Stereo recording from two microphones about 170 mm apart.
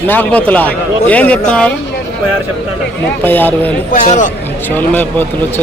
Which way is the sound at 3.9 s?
50° left (ahead or behind).